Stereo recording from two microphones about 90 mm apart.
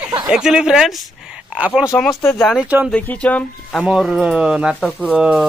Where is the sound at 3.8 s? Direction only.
5° right (ahead or behind).